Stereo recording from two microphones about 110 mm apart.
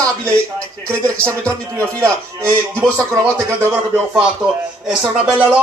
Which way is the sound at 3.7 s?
10° right (ahead or behind).